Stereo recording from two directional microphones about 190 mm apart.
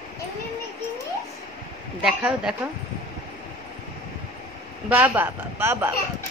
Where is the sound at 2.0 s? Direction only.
5° right (ahead or behind).